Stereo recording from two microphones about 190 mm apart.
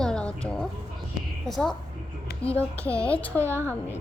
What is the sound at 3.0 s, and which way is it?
Speech, 10° left (ahead or behind).